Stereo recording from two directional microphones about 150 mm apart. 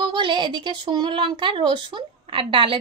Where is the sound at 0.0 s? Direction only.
35° right (ahead or behind).